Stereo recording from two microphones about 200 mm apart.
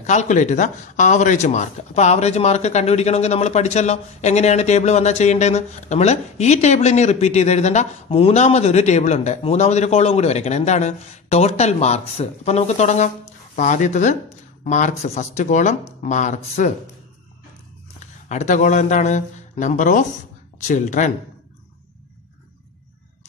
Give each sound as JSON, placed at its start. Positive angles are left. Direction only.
{"t": 0.0, "sound": "speech", "side_deg": 35}
{"t": 18.3, "sound": "speech", "side_deg": 35}